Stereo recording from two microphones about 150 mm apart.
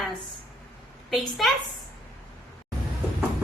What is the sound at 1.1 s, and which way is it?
Speech, centre (ahead or behind).